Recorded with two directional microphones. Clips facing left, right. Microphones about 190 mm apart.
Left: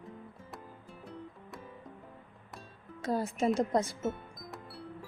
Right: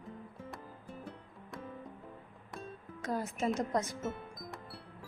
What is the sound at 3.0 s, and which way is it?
Speech, 30° left (ahead or behind).